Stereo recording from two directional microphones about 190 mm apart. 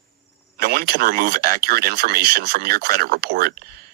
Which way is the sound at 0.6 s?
50° right (ahead or behind).